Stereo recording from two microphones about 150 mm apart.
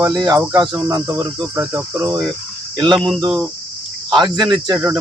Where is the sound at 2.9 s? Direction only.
Centre (ahead or behind).